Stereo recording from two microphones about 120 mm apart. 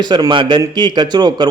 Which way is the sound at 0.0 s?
35° right (ahead or behind).